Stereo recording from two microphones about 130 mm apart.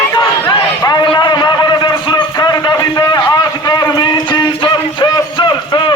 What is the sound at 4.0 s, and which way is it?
Music, 35° left (ahead or behind).